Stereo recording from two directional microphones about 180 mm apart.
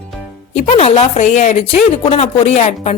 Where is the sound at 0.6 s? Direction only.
40° left (ahead or behind).